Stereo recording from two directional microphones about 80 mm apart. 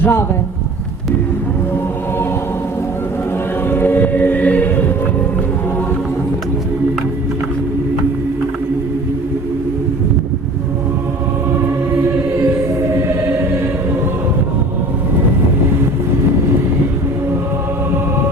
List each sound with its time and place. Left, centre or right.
0.0 s speech: left
3.7 s music: left